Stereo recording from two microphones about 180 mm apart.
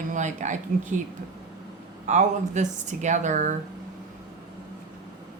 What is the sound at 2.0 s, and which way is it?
Speech, 40° right (ahead or behind).